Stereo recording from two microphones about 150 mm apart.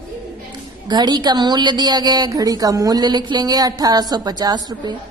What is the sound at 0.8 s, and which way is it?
A woman's voice, 25° right (ahead or behind).